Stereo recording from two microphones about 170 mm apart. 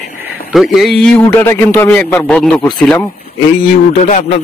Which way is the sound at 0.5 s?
Centre (ahead or behind).